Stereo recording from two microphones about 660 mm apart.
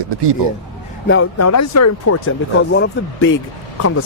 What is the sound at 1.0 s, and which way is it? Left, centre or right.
Speech, centre.